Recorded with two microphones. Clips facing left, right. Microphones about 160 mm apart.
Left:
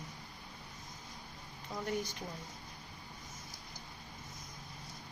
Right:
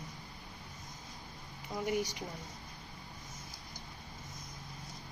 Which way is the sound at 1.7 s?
10° right (ahead or behind).